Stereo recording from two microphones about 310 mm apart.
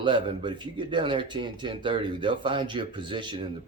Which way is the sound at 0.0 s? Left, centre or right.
Centre.